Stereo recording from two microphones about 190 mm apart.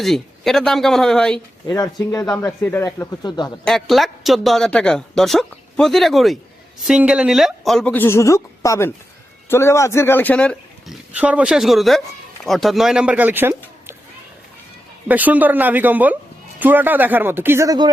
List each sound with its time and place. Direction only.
0.0 s speech: centre (ahead or behind)
1.6 s speech: 20° left (ahead or behind)
3.6 s speech: centre (ahead or behind)
11.1 s speech: 5° right (ahead or behind)
15.0 s speech: 10° right (ahead or behind)